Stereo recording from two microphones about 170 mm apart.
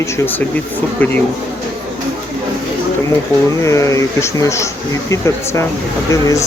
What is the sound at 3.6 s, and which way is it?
Speech, 15° left (ahead or behind).